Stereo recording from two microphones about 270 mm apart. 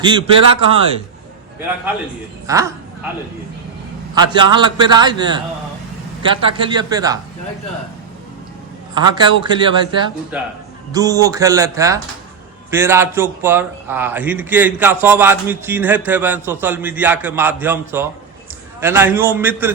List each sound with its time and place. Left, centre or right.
0.0 s a man's voice: centre
2.5 s a man's voice: centre
4.1 s a man's voice: centre
6.5 s a man's voice: centre
9.0 s a man's voice: centre
10.3 s a man's voice: centre